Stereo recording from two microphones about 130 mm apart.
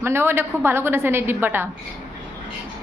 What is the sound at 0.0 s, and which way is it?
Speech, 20° right (ahead or behind).